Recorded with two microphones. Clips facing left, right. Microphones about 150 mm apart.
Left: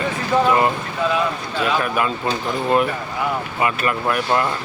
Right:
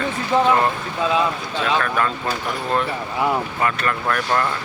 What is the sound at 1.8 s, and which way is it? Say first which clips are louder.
Speech: left 1 dB; 10° left (ahead or behind).